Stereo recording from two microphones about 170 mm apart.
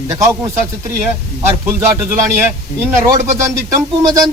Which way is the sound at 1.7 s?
10° right (ahead or behind).